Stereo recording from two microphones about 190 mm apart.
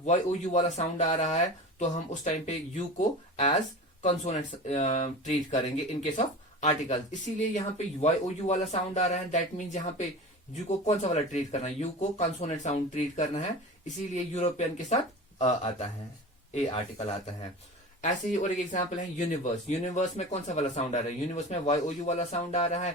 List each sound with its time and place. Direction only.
0.0 s speech: 40° left (ahead or behind)